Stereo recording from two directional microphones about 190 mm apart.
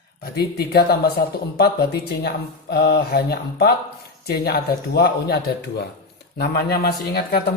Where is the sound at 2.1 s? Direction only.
60° left (ahead or behind).